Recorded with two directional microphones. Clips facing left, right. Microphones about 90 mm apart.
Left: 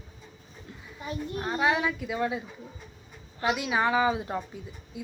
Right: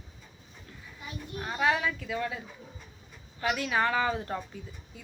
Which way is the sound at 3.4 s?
15° left (ahead or behind).